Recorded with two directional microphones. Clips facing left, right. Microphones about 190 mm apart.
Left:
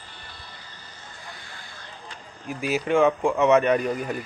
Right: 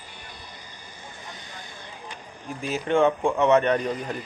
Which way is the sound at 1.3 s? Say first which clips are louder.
Right 2 dB; 20° right (ahead or behind).